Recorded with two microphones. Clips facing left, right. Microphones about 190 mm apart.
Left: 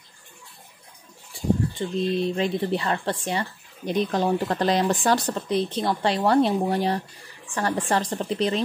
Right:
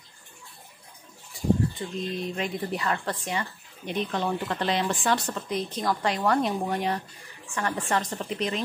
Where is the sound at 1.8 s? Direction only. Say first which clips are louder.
Left 7 dB; 30° left (ahead or behind).